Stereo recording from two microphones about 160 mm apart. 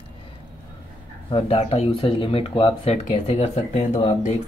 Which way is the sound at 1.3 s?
35° left (ahead or behind).